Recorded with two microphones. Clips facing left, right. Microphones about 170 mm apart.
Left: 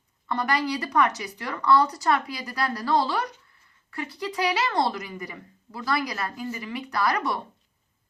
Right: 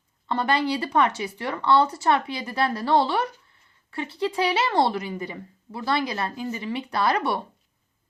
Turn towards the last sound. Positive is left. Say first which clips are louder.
# right 2 dB
turn(degrees=-30)  # may be behind; listen again after turning